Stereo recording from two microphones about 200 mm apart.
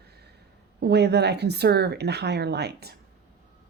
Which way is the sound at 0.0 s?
55° right (ahead or behind).